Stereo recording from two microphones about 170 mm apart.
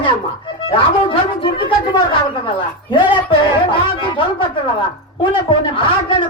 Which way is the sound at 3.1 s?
25° left (ahead or behind).